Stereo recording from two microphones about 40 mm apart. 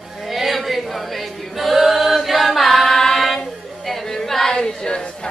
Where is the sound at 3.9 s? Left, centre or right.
Centre.